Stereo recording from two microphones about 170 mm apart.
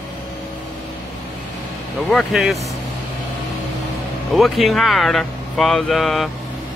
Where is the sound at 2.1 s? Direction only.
Centre (ahead or behind).